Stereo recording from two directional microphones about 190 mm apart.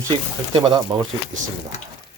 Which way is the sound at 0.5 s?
25° right (ahead or behind).